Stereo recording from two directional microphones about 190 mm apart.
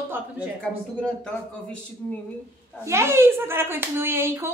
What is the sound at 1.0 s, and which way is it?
Speech, 5° left (ahead or behind).